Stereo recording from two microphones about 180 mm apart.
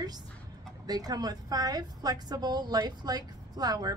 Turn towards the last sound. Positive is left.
turn(degrees=-20)  # may be behind; listen again after turning